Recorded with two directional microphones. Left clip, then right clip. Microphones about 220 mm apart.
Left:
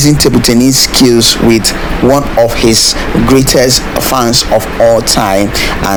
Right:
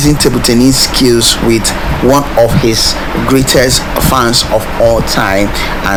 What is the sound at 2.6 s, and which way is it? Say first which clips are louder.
Speech: left 2 dB; 25° left (ahead or behind).